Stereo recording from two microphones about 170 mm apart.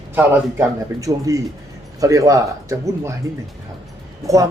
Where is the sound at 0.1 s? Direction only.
15° right (ahead or behind).